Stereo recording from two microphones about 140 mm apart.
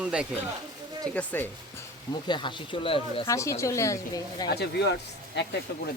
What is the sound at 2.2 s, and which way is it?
Speech, 35° left (ahead or behind).